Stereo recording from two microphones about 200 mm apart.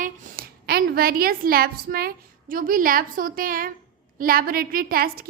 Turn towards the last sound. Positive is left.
turn(degrees=-45)  # may be behind; listen again after turning